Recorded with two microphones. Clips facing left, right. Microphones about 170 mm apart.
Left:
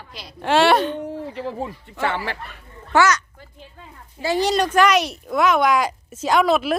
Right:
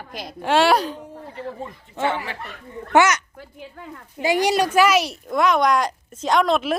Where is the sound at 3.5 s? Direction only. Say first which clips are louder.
Right 6 dB; 65° right (ahead or behind).